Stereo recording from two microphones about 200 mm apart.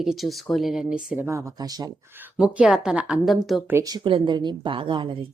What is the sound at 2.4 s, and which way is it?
A woman's voice, 5° right (ahead or behind).